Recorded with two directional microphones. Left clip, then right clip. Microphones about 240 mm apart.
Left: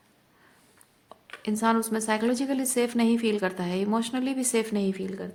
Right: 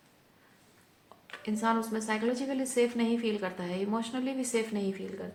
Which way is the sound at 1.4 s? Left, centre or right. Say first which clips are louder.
Left 5 dB; left.